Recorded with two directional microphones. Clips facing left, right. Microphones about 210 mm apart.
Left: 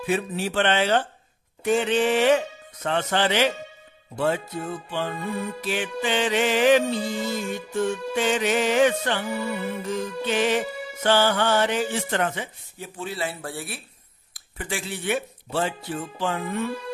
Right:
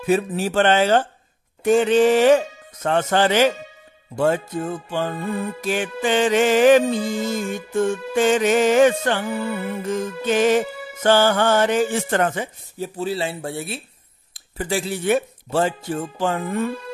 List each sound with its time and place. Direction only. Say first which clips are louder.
0.0 s music: right 5 dB; 40° right (ahead or behind); by 13.8 s 25° right (ahead or behind)
14.3 s speech: right 8 dB; 35° right (ahead or behind)